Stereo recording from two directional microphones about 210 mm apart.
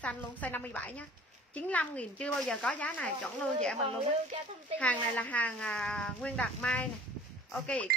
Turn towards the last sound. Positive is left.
turn(degrees=5)  # may be behind; listen again after turning